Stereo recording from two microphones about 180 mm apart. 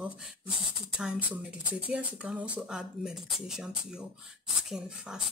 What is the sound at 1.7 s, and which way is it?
Speech, 5° right (ahead or behind).